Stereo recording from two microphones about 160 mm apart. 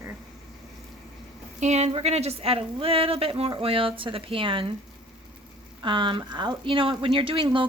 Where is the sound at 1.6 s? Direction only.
45° right (ahead or behind).